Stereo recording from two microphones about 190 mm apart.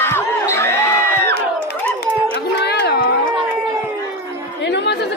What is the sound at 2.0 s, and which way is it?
Run, 60° left (ahead or behind).